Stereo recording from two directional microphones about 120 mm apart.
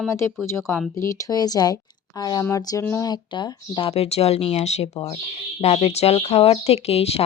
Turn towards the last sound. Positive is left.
turn(degrees=55)  # may be behind; listen again after turning